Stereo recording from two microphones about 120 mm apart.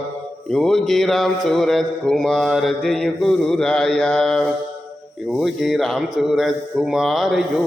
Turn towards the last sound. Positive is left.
turn(degrees=-5)  # may be behind; listen again after turning